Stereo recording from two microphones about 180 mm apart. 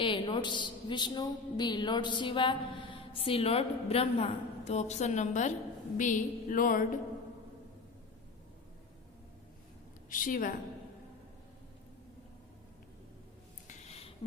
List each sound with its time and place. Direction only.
0.0 s a woman's voice: 25° left (ahead or behind); by 5.5 s 40° left (ahead or behind)
6.0 s music: 45° left (ahead or behind)
10.1 s a woman's voice: 50° left (ahead or behind)
13.7 s a sound: 35° left (ahead or behind)